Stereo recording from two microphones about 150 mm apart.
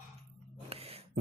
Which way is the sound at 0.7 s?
40° right (ahead or behind).